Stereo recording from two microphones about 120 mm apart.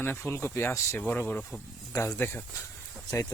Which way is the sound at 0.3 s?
20° left (ahead or behind).